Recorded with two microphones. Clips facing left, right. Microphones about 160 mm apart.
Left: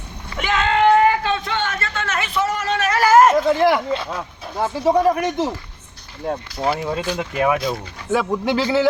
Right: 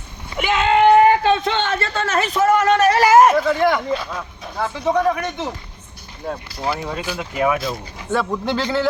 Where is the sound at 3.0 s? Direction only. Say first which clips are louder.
Left 1 dB; 15° right (ahead or behind).